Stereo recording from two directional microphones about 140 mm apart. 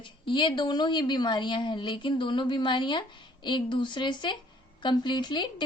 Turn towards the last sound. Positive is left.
turn(degrees=30)  # may be behind; listen again after turning